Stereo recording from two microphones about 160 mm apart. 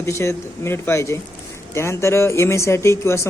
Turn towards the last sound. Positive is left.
turn(degrees=15)  # may be behind; listen again after turning